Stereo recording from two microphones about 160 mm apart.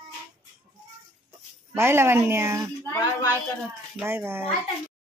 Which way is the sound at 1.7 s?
15° right (ahead or behind).